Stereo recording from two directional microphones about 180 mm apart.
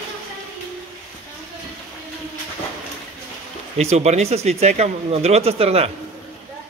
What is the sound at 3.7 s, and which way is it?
A man's voice, 35° right (ahead or behind).